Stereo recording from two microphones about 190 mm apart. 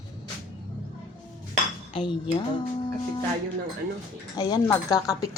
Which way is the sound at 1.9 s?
25° left (ahead or behind).